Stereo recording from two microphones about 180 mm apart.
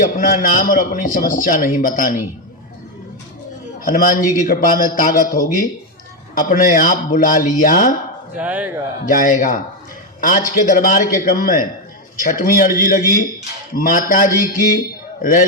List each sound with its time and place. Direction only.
0.0 s a man's voice: 50° left (ahead or behind)
3.8 s a man's voice: 50° left (ahead or behind)
8.4 s speech: 10° right (ahead or behind)
9.0 s a man's voice: 50° left (ahead or behind)